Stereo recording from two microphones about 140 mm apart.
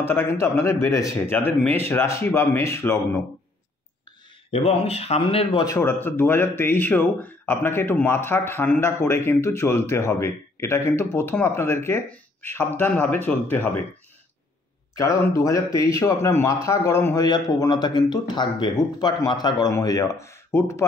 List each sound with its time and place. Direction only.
0.0 s speech: 15° left (ahead or behind)
4.5 s speech: 45° left (ahead or behind)
5.7 s speech: 15° left (ahead or behind)
15.0 s speech: 20° left (ahead or behind)